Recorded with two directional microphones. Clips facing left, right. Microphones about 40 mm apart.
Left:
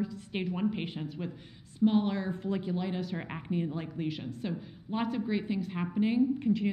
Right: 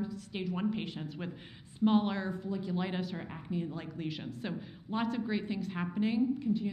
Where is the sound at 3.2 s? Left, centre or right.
Left.